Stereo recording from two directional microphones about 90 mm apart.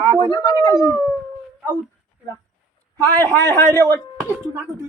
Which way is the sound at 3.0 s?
20° left (ahead or behind).